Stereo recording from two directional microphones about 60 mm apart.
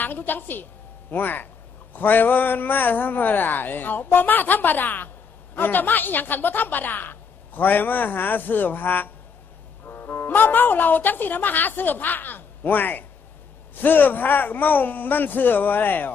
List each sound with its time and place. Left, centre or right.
0.0 s a woman's voice: left